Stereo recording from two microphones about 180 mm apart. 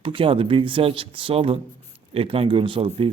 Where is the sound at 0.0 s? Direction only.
30° right (ahead or behind).